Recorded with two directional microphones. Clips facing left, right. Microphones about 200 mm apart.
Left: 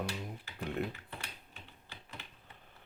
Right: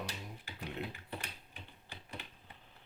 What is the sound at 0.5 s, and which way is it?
Speech, 50° left (ahead or behind).